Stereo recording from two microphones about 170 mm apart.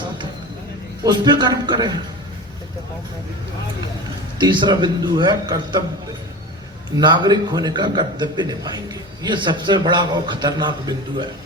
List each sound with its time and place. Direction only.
1.0 s a man's voice: 25° right (ahead or behind)
4.4 s a man's voice: 25° right (ahead or behind)
6.9 s a man's voice: 25° right (ahead or behind)